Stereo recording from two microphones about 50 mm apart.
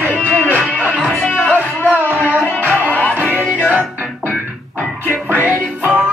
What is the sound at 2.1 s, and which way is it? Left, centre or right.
Music, right.